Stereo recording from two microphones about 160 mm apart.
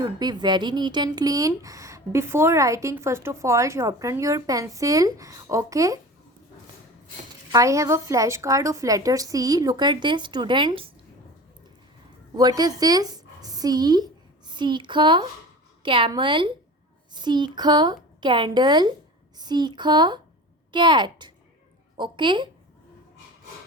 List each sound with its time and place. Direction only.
0.0 s speech: 25° right (ahead or behind)
7.5 s speech: 20° right (ahead or behind)
12.4 s a woman's voice: 25° right (ahead or behind)